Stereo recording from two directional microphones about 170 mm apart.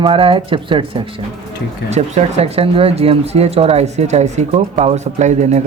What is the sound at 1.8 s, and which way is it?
Speech, 40° right (ahead or behind).